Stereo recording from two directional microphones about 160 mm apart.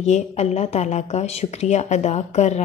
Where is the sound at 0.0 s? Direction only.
45° left (ahead or behind).